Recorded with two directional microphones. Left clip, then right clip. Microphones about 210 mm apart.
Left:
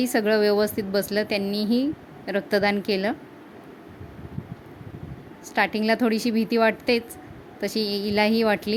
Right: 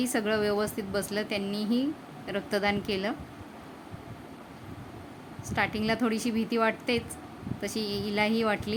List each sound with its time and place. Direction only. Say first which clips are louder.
0.0 s a woman's voice: left 7 dB; 20° left (ahead or behind)
5.5 s a woman's voice: left 6 dB; 20° left (ahead or behind)